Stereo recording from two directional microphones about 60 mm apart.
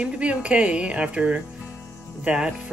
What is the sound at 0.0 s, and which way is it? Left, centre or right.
Music, right.